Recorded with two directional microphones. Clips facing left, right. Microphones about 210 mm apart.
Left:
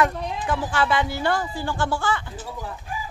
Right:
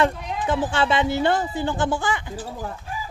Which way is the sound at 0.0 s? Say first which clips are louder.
Right 1 dB; 25° right (ahead or behind).